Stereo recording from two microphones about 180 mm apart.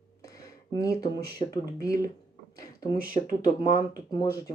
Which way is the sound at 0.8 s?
20° left (ahead or behind).